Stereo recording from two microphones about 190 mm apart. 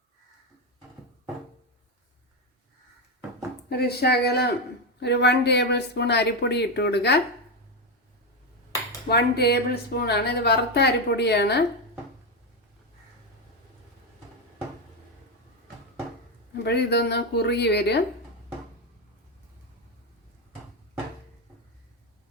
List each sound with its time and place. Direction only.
3.7 s a woman's voice: 55° left (ahead or behind)
9.0 s a woman's voice: 60° left (ahead or behind)
16.6 s a woman's voice: 60° left (ahead or behind)